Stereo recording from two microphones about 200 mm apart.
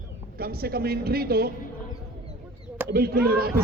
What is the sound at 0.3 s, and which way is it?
A man's voice, 50° right (ahead or behind).